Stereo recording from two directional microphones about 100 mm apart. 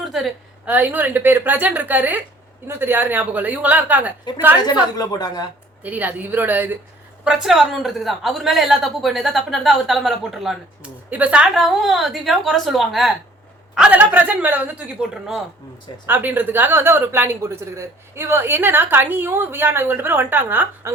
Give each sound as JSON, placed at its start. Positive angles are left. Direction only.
{"t": 0.0, "sound": "a woman's voice", "side_deg": 0}
{"t": 0.6, "sound": "a woman's voice", "side_deg": -15}
{"t": 4.6, "sound": "a woman's voice", "side_deg": 40}
{"t": 5.8, "sound": "speech", "side_deg": -15}
{"t": 7.3, "sound": "a woman's voice", "side_deg": -5}
{"t": 11.1, "sound": "a woman's voice", "side_deg": -15}
{"t": 11.6, "sound": "a woman's voice", "side_deg": 0}
{"t": 13.7, "sound": "a woman's voice", "side_deg": -15}
{"t": 16.0, "sound": "speech", "side_deg": -20}